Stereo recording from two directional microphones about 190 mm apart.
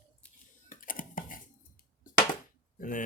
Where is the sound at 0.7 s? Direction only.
45° left (ahead or behind).